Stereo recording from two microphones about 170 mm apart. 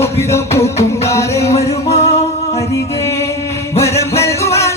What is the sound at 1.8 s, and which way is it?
Music, 40° left (ahead or behind).